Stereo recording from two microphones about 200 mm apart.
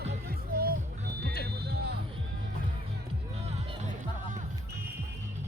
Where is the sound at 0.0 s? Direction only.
50° right (ahead or behind).